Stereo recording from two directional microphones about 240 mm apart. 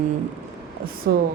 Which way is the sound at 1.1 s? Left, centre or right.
Right.